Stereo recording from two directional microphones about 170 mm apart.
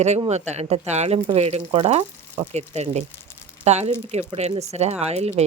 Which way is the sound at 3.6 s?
40° right (ahead or behind).